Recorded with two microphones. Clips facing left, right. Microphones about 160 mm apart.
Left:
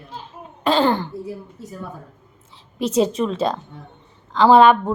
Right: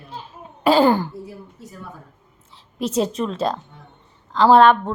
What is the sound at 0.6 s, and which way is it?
Speech, 10° right (ahead or behind).